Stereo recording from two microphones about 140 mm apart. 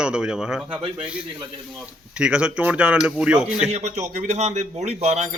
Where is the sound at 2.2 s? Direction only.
5° right (ahead or behind).